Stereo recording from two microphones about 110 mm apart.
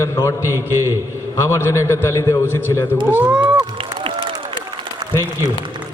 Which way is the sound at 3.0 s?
15° right (ahead or behind).